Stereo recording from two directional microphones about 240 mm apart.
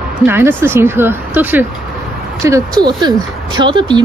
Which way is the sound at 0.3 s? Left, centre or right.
Centre.